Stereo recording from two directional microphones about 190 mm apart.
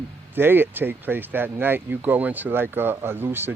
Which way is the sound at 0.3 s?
10° right (ahead or behind).